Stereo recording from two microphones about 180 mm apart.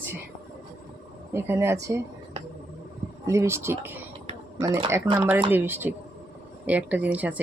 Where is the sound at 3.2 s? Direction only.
15° right (ahead or behind).